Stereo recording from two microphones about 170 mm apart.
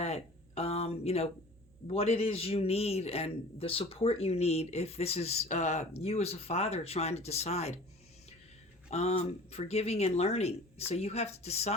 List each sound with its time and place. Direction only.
0.0 s a sound: 40° left (ahead or behind)
1.9 s a man's voice: 35° left (ahead or behind)
8.9 s a man's voice: 40° left (ahead or behind)